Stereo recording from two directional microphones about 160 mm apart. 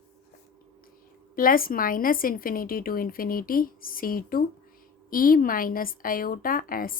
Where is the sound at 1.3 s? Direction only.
60° left (ahead or behind).